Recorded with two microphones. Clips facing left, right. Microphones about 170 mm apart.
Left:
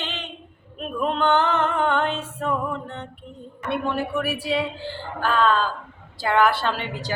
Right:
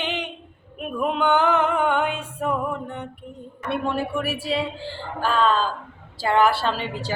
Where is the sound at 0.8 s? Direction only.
10° right (ahead or behind).